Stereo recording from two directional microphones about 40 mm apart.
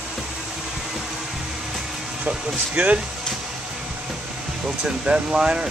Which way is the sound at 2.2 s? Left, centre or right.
Right.